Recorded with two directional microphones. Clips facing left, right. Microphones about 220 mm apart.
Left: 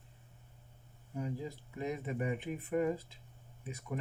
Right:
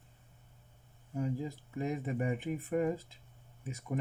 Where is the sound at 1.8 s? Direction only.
45° right (ahead or behind).